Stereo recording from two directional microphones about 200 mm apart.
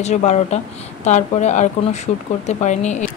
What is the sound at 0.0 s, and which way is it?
Speech, 35° left (ahead or behind).